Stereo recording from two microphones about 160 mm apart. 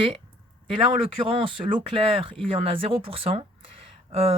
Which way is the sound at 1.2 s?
35° right (ahead or behind).